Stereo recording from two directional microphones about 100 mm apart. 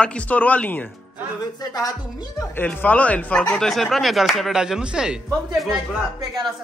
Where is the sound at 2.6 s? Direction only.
15° left (ahead or behind); by 5.1 s 10° right (ahead or behind).